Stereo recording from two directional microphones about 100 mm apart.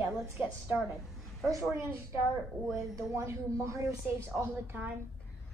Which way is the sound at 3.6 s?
25° right (ahead or behind).